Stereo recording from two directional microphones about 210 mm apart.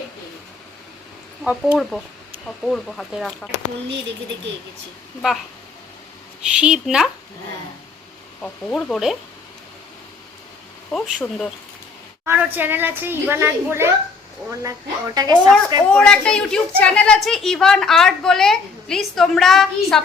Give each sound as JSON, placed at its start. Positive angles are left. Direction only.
{"t": 1.5, "sound": "a woman's voice", "side_deg": -5}
{"t": 6.5, "sound": "a woman's voice", "side_deg": -5}
{"t": 8.4, "sound": "a woman's voice", "side_deg": 5}
{"t": 10.9, "sound": "a woman's voice", "side_deg": 0}
{"t": 12.2, "sound": "a child's voice", "side_deg": -10}
{"t": 15.9, "sound": "a woman's voice", "side_deg": 5}